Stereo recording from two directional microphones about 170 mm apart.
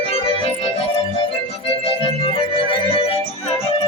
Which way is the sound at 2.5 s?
30° left (ahead or behind).